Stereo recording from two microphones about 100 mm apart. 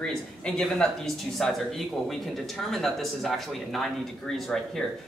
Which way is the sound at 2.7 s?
Centre (ahead or behind).